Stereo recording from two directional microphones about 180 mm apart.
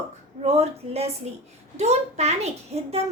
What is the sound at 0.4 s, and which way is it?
A woman's voice, 35° right (ahead or behind).